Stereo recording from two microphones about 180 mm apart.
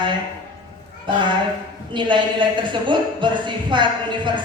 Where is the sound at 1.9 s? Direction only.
25° right (ahead or behind).